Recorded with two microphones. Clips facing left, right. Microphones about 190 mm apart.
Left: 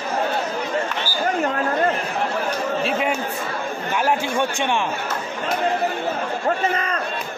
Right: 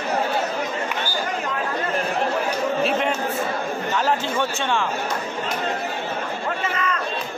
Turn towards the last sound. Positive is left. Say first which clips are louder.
# left 3 dB
turn(degrees=40)  # may be behind; listen again after turning